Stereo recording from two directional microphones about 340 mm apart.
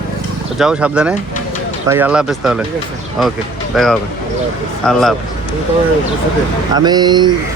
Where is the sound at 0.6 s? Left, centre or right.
Centre.